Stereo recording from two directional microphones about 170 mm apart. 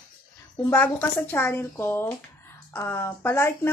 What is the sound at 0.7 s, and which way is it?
Speech, 10° left (ahead or behind).